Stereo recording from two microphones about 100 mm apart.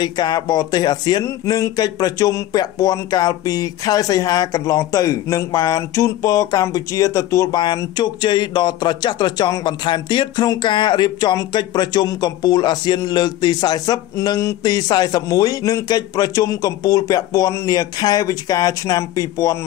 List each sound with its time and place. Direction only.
0.0 s speech: 45° left (ahead or behind)
1.2 s speech: 35° left (ahead or behind)
7.5 s speech: 45° left (ahead or behind)